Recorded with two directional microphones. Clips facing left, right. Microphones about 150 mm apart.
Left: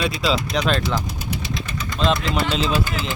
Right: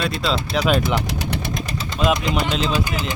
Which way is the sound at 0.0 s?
Centre (ahead or behind).